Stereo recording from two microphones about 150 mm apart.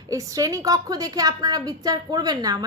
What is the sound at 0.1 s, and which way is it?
A woman's voice, 20° right (ahead or behind).